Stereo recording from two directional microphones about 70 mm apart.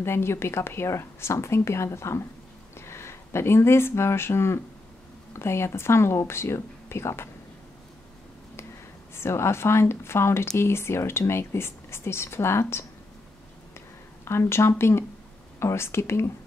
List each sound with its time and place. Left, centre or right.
0.0 s a woman's voice: left
9.1 s a woman's voice: left
14.2 s a woman's voice: left